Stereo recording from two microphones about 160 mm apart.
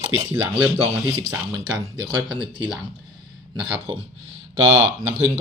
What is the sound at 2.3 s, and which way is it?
Speech, 30° right (ahead or behind).